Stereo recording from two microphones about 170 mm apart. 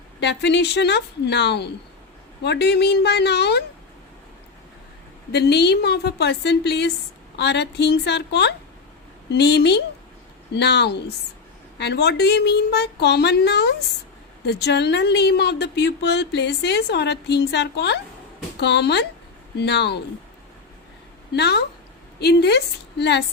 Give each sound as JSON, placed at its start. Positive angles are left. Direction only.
{"t": 0.2, "sound": "speech", "side_deg": 90}
{"t": 5.3, "sound": "a woman's voice", "side_deg": 75}
{"t": 21.3, "sound": "a woman's voice", "side_deg": 75}